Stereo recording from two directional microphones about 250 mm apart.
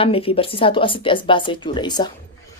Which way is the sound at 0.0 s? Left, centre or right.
Left.